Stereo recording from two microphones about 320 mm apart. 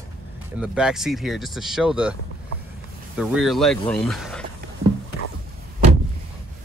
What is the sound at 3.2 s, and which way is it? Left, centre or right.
Speech, centre.